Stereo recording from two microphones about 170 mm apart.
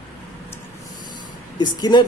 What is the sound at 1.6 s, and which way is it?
Speech, 25° left (ahead or behind).